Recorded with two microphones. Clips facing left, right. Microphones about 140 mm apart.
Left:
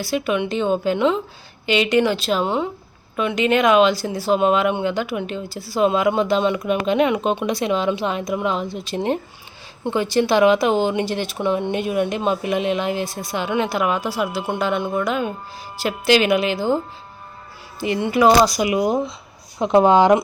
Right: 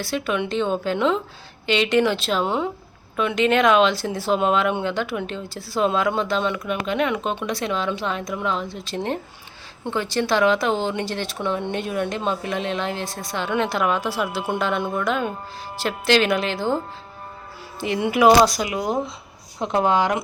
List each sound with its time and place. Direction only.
0.0 s a woman's voice: 5° left (ahead or behind)
18.0 s speech: 10° right (ahead or behind)
18.6 s speech: 15° left (ahead or behind)